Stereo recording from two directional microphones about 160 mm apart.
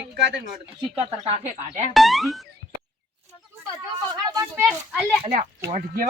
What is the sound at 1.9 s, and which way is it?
Speech, centre (ahead or behind).